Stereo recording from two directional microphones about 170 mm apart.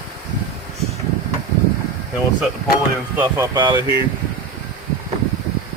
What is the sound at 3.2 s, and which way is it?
Speech, 20° right (ahead or behind).